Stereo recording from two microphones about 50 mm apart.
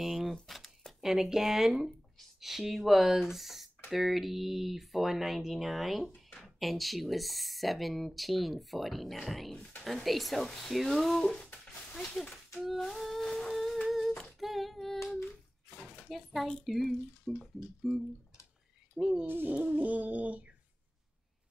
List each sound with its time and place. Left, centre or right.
0.0 s a sound: centre
1.0 s speech: centre
12.7 s humming: centre
15.2 s bathtub: left
16.6 s speech: centre
18.9 s speech: centre
19.2 s music: right
19.5 s a sound: right